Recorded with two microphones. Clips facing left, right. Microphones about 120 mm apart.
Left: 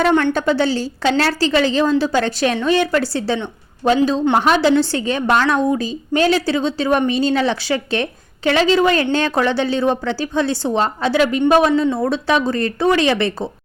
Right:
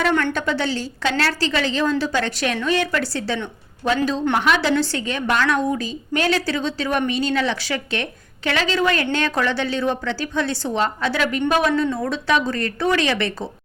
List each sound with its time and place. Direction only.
0.1 s a woman's voice: 20° left (ahead or behind)
0.3 s a woman's voice: 35° left (ahead or behind)